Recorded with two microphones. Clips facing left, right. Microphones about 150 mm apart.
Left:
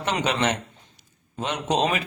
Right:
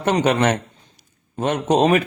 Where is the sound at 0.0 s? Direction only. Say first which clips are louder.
Right 7 dB; 50° right (ahead or behind).